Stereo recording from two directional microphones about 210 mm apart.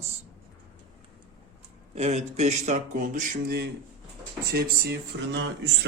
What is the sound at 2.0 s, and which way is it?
Speech, 30° right (ahead or behind).